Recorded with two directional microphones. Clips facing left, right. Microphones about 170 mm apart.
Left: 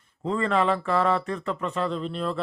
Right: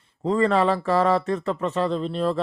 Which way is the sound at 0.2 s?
35° right (ahead or behind).